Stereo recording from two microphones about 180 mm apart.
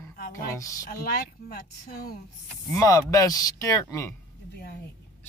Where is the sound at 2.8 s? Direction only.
15° left (ahead or behind).